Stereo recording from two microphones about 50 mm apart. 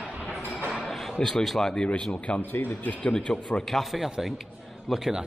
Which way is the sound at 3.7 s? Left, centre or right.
Centre.